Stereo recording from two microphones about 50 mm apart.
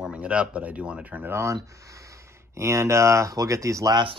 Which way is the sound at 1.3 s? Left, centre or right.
Right.